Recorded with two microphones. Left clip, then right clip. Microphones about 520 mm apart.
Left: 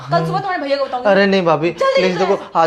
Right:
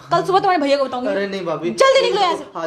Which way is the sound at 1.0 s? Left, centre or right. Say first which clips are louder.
Left 9 dB; left.